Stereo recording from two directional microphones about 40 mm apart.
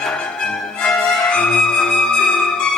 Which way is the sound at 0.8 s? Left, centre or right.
Centre.